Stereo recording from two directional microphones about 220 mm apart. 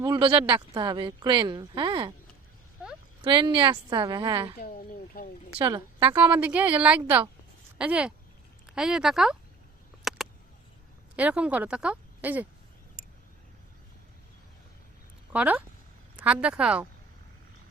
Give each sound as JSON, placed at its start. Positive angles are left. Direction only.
{"t": 0.0, "sound": "speech", "side_deg": -20}
{"t": 3.2, "sound": "speech", "side_deg": -20}
{"t": 5.2, "sound": "speech", "side_deg": 40}
{"t": 5.5, "sound": "speech", "side_deg": -20}
{"t": 6.4, "sound": "a woman's voice", "side_deg": -5}
{"t": 10.0, "sound": "a sound", "side_deg": 0}
{"t": 11.2, "sound": "a woman's voice", "side_deg": -5}
{"t": 15.3, "sound": "a woman's voice", "side_deg": -5}